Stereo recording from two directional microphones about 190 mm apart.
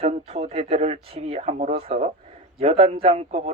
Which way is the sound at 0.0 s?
30° right (ahead or behind).